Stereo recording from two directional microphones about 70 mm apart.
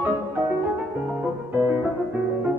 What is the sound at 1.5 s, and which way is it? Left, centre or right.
Music, right.